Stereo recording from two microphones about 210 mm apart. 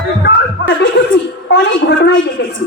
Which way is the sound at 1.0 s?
55° left (ahead or behind).